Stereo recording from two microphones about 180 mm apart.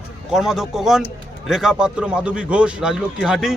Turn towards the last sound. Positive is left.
turn(degrees=-5)  # may be behind; listen again after turning